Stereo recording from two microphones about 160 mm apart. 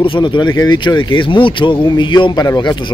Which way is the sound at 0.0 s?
30° left (ahead or behind).